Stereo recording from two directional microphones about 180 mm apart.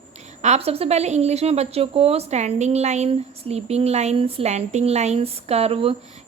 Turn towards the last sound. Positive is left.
turn(degrees=-35)  # may be behind; listen again after turning